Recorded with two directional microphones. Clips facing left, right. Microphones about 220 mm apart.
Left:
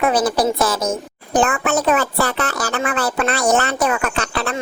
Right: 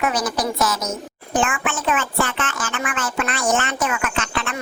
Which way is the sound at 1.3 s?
40° left (ahead or behind).